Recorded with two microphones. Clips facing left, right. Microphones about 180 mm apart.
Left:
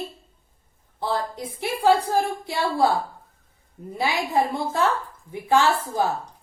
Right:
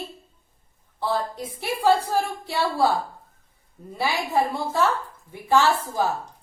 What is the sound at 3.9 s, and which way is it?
A woman's voice, 15° left (ahead or behind).